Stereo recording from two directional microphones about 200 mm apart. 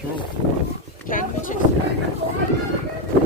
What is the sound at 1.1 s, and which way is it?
Speech, 40° left (ahead or behind).